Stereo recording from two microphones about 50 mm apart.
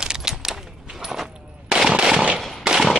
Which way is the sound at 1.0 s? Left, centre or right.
Centre.